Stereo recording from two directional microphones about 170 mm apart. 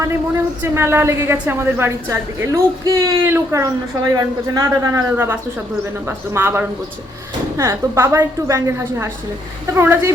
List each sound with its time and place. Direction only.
0.0 s a woman's voice: 15° right (ahead or behind)